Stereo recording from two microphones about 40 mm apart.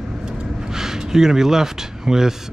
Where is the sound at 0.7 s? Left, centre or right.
Centre.